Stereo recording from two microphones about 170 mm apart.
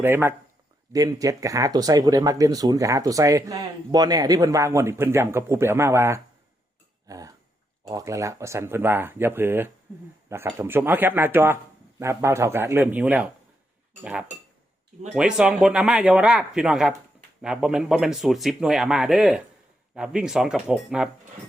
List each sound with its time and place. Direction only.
0.0 s speech: 15° right (ahead or behind)
7.1 s a sound: 20° right (ahead or behind)
7.9 s a man's voice: 20° right (ahead or behind); by 21.1 s 5° right (ahead or behind)